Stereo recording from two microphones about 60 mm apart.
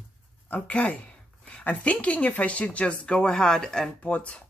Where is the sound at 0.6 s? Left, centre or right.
Left.